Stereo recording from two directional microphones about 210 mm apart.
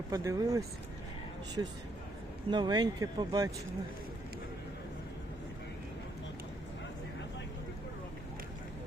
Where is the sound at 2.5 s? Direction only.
20° right (ahead or behind).